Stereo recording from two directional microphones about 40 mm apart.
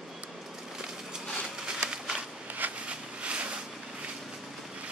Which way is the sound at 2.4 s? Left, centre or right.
Right.